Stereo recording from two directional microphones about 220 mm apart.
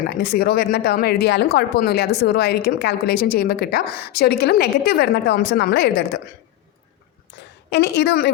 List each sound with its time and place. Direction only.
0.2 s speech: 45° left (ahead or behind)
7.7 s speech: 50° left (ahead or behind)